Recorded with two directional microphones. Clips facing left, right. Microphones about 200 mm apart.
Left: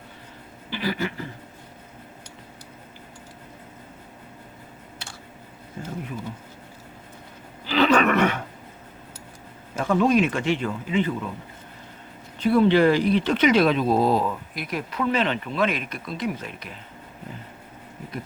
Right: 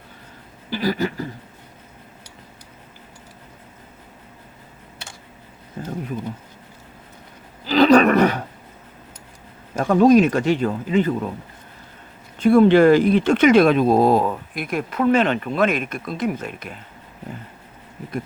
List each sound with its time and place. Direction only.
0.7 s speech: 40° right (ahead or behind)
5.8 s a sound: 35° right (ahead or behind)
7.7 s roaring cats: 35° right (ahead or behind)
9.8 s speech: 40° right (ahead or behind)
12.4 s speech: 45° right (ahead or behind)